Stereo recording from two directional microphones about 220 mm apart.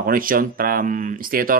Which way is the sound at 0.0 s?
40° right (ahead or behind).